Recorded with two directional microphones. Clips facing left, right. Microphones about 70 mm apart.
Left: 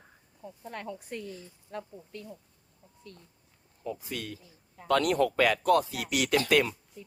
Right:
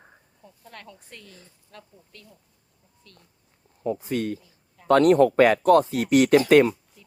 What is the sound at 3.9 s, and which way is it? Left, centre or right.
Speech, right.